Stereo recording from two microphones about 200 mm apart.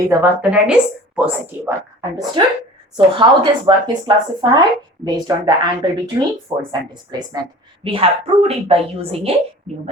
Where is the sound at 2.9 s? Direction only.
25° right (ahead or behind).